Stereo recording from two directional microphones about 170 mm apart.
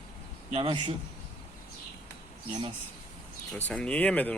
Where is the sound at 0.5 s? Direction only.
30° right (ahead or behind).